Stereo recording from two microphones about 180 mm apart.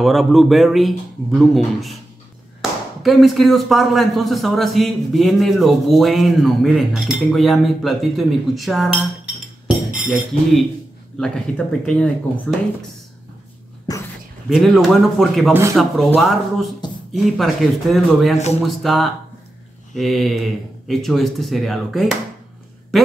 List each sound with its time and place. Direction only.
0.0 s a man's voice: centre (ahead or behind)
3.0 s a man's voice: centre (ahead or behind)
10.0 s speech: 5° right (ahead or behind)
11.1 s a man's voice: 5° left (ahead or behind)
13.9 s a sound: 20° left (ahead or behind)
14.5 s a man's voice: centre (ahead or behind)
22.9 s a sound: centre (ahead or behind)